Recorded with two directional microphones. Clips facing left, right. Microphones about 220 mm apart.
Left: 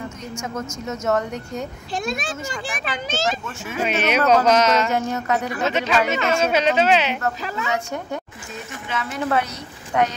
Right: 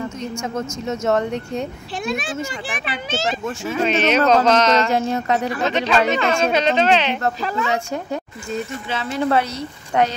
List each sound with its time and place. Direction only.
0.8 s speech: 30° right (ahead or behind)
2.0 s a child's voice: 40° left (ahead or behind)
3.8 s a sound: 10° left (ahead or behind)
5.1 s speech: 30° right (ahead or behind)
5.7 s a sound: 10° left (ahead or behind)
7.2 s speech: 35° right (ahead or behind)
8.8 s speech: 30° right (ahead or behind)